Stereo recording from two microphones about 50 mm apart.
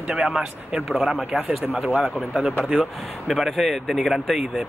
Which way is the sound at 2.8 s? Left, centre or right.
Centre.